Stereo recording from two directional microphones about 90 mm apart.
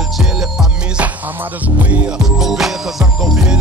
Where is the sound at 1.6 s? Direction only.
20° right (ahead or behind).